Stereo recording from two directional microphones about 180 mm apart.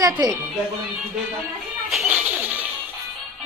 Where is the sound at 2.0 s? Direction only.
10° right (ahead or behind).